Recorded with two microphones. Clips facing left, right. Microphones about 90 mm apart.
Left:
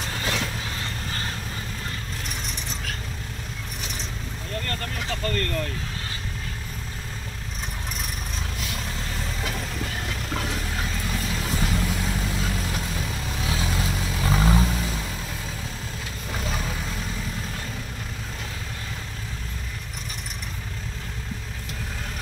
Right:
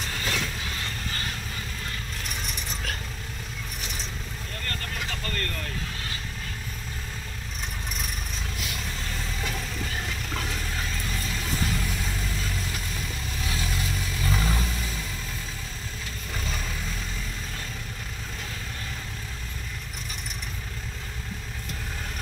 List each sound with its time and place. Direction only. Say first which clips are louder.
0.2 s train: left 2 dB; 20° left (ahead or behind)
11.3 s vehicle: left 2 dB; 25° left (ahead or behind)